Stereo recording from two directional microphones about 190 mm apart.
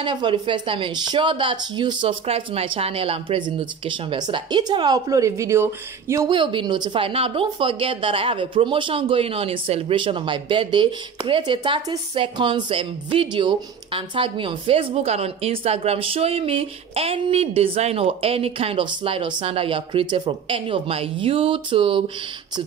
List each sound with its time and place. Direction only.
0.0 s speech: 25° right (ahead or behind)